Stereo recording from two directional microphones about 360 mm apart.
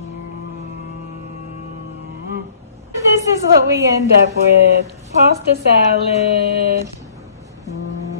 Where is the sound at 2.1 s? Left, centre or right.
Right.